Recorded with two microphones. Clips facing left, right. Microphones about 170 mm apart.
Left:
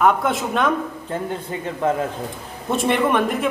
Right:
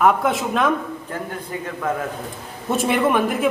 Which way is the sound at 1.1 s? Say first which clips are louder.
Left 4 dB; 25° left (ahead or behind).